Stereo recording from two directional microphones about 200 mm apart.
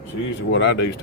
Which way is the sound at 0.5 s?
60° left (ahead or behind).